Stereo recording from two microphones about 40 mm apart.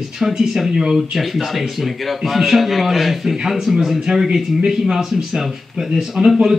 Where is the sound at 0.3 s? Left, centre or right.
Centre.